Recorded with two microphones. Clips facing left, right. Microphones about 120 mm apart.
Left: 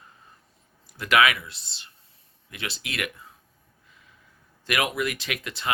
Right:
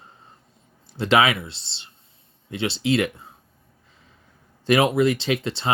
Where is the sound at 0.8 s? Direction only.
30° right (ahead or behind).